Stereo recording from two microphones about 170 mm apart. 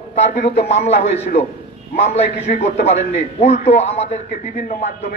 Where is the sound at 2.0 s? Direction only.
40° left (ahead or behind).